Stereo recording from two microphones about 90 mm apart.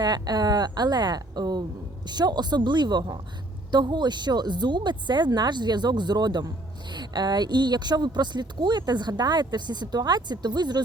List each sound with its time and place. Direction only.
0.0 s a woman's voice: 50° right (ahead or behind)